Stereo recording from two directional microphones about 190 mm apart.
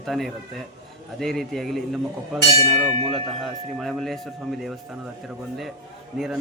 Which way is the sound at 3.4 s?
Centre (ahead or behind).